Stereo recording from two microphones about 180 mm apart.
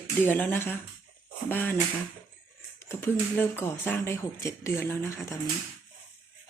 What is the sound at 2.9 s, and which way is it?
Speech, 15° left (ahead or behind).